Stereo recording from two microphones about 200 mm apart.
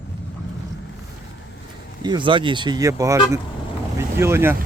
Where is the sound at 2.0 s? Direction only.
25° right (ahead or behind).